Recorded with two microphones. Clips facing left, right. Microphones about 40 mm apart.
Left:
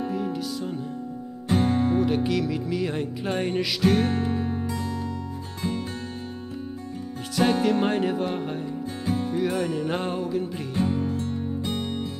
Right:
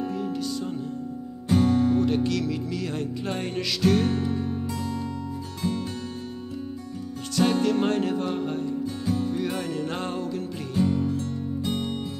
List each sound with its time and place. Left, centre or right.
0.1 s music: centre
1.5 s music: left
2.0 s music: centre
4.1 s music: left
4.6 s music: centre
7.3 s music: centre
8.8 s music: left
9.3 s music: centre
10.8 s music: left
11.6 s music: centre